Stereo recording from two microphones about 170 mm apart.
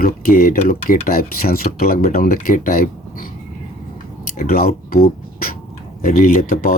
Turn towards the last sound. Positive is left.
turn(degrees=60)  # may be behind; listen again after turning